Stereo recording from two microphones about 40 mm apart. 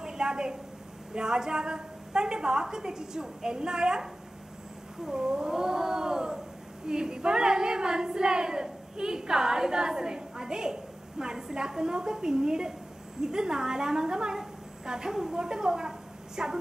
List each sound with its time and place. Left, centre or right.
0.0 s a sound: centre
1.1 s child singing: centre
5.0 s cat: centre
6.9 s child singing: centre